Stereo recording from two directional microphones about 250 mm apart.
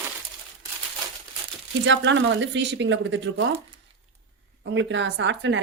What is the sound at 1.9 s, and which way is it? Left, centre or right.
A woman's voice, right.